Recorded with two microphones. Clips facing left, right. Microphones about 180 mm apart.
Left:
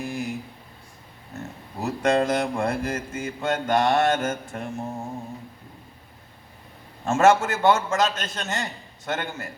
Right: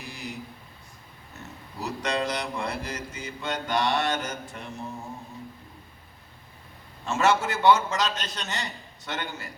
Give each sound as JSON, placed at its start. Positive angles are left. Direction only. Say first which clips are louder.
{"t": 0.0, "sound": "a sound", "louder": "left 9 dB", "side_deg": 50}
{"t": 1.8, "sound": "mantra", "louder": "left 7 dB", "side_deg": 50}
{"t": 7.0, "sound": "mantra", "louder": "left 6 dB", "side_deg": 50}